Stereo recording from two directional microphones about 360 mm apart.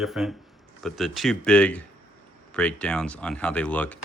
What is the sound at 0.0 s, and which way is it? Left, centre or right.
Speech, centre.